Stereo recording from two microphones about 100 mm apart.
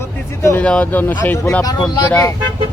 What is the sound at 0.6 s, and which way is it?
Speech, 10° left (ahead or behind).